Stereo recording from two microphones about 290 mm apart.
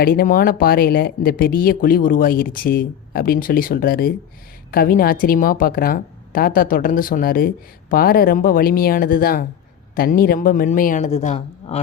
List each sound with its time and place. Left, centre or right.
0.0 s a woman's voice: left